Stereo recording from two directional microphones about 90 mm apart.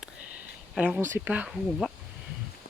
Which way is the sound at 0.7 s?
10° right (ahead or behind).